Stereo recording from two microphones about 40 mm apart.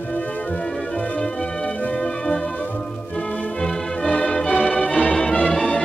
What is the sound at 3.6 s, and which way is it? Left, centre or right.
Music, centre.